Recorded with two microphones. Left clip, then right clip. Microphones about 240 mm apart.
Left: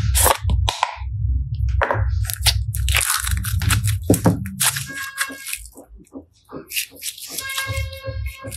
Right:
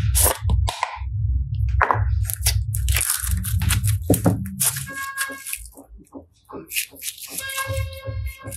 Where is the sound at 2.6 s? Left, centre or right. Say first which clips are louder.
Left 6 dB; centre.